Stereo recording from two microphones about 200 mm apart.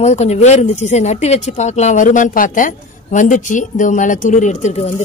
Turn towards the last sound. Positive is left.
turn(degrees=35)  # may be behind; listen again after turning